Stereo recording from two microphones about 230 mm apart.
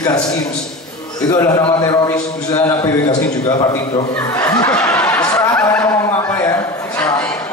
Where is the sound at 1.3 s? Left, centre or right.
Centre.